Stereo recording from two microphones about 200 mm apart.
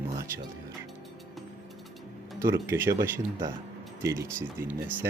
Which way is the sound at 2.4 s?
10° right (ahead or behind).